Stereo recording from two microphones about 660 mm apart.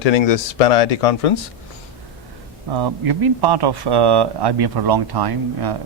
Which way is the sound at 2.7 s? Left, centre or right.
Right.